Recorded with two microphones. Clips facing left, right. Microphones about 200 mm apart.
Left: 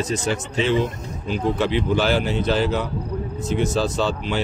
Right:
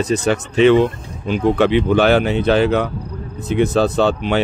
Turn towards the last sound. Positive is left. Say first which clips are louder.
# right 7 dB
turn(degrees=-60)  # may be behind; listen again after turning